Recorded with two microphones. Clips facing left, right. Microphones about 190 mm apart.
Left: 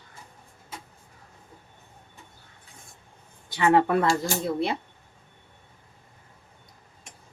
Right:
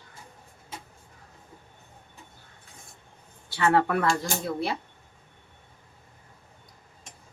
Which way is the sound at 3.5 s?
20° left (ahead or behind).